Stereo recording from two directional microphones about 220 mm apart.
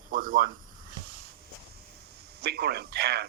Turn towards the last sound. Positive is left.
turn(degrees=-45)  # may be behind; listen again after turning